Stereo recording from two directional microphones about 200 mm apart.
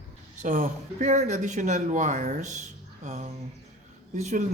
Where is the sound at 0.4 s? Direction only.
40° right (ahead or behind).